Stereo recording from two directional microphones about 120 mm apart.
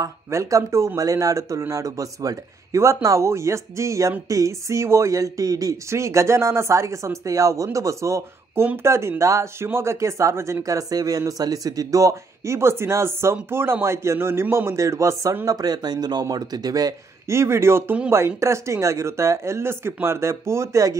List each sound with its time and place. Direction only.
0.0 s speech: 25° right (ahead or behind)